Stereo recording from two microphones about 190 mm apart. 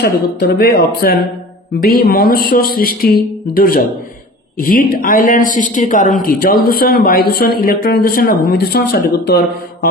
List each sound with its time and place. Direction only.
0.0 s a woman's voice: 55° left (ahead or behind)